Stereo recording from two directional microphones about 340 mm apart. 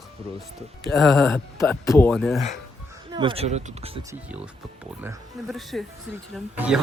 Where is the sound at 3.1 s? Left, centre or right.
Centre.